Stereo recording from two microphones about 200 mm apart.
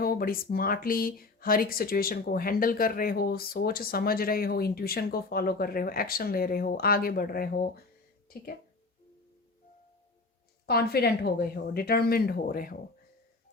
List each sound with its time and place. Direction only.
0.0 s speech: 45° left (ahead or behind)
10.7 s speech: 50° left (ahead or behind)